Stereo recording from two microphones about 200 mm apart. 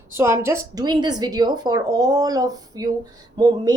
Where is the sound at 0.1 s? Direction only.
15° right (ahead or behind).